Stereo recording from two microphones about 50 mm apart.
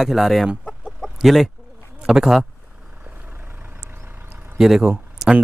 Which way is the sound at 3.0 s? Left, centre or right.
Right.